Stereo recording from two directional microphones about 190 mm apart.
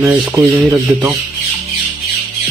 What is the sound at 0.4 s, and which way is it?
Speech, 10° right (ahead or behind).